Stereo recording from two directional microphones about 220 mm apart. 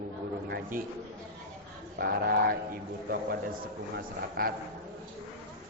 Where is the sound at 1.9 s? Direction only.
40° right (ahead or behind).